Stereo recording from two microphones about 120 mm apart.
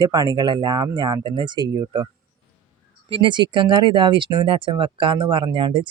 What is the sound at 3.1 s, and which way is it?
Speech, 45° right (ahead or behind).